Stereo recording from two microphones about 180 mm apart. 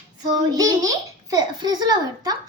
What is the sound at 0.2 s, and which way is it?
A child's voice, 20° right (ahead or behind).